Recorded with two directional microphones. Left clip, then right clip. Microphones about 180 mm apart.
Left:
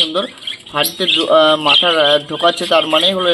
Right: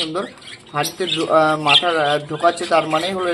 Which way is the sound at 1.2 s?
40° left (ahead or behind).